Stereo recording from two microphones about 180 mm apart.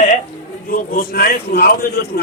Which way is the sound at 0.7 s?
55° left (ahead or behind).